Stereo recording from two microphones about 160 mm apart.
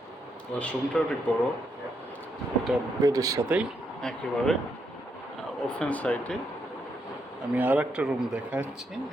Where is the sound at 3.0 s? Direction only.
20° right (ahead or behind).